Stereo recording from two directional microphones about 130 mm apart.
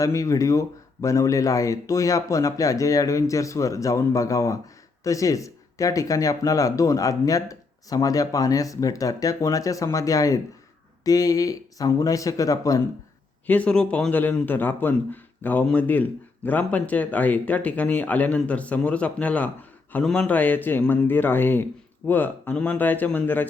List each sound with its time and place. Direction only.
0.0 s speech: 25° left (ahead or behind)
13.5 s a man's voice: 10° left (ahead or behind)